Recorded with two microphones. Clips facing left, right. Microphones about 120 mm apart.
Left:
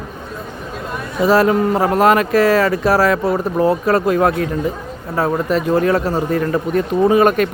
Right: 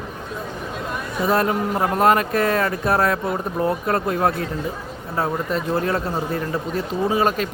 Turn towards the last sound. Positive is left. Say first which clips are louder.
# left 7 dB
turn(degrees=65)  # may be behind; listen again after turning